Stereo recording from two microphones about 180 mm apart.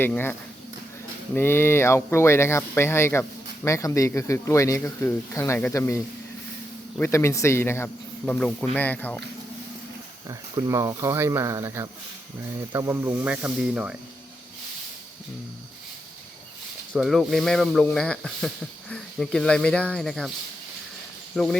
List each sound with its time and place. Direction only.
0.0 s speech: 10° left (ahead or behind)
7.0 s speech: 15° left (ahead or behind)
10.2 s speech: 20° right (ahead or behind)
16.9 s speech: centre (ahead or behind)
21.3 s speech: centre (ahead or behind)